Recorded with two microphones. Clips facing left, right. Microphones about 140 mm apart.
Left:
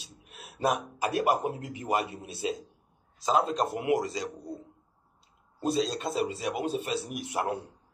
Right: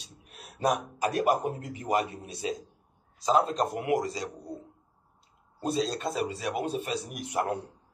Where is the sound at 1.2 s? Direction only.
5° left (ahead or behind).